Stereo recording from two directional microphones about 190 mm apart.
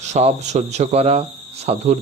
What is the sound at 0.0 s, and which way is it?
Speech, 35° right (ahead or behind).